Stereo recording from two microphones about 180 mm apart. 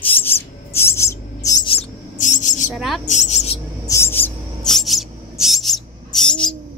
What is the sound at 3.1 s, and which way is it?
Speech, 40° left (ahead or behind).